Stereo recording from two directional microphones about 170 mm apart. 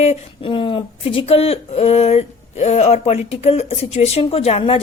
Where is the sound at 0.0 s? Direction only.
35° left (ahead or behind).